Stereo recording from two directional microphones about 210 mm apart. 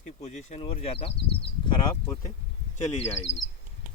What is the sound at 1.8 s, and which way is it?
Speech, 15° left (ahead or behind).